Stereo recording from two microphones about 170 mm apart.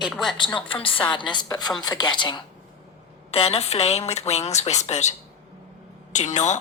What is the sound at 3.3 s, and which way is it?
A woman's voice, 35° left (ahead or behind).